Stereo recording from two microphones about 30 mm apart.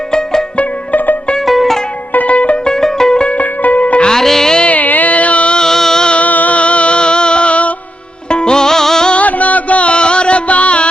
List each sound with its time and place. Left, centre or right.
0.1 s music: left
1.5 s music: centre
2.2 s music: left
2.6 s music: centre
3.3 s music: left
4.1 s music: centre
4.7 s a sound: left
5.6 s music: centre
6.2 s music: left
6.6 s music: left
8.3 s music: left
9.1 s music: left
9.9 s music: left